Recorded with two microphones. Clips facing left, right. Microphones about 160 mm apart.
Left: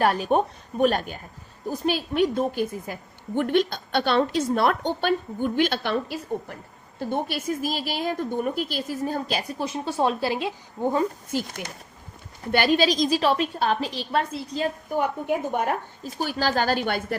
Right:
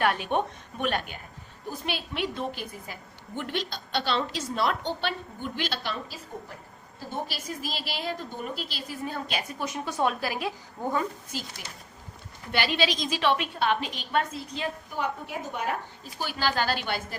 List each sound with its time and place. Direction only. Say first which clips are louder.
0.0 s a woman's voice: left 5 dB; 40° left (ahead or behind); by 6.1 s 60° left (ahead or behind)
7.3 s a woman's voice: left 8 dB; 50° left (ahead or behind); by 10.5 s 25° left (ahead or behind)
11.3 s a woman's voice: left 9 dB; 55° left (ahead or behind)